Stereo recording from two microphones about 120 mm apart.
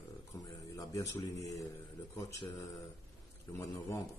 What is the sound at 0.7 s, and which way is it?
Speech, 25° left (ahead or behind).